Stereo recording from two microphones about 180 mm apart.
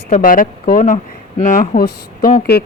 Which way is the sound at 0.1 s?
50° left (ahead or behind).